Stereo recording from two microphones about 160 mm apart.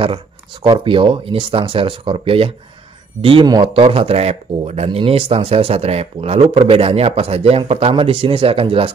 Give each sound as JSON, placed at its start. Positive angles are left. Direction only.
{"t": 0.0, "sound": "speech", "side_deg": -30}